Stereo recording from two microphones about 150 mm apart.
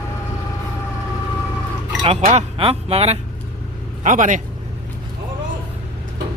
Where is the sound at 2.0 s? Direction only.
40° right (ahead or behind).